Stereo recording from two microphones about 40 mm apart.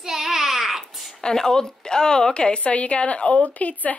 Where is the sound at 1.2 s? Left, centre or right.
Centre.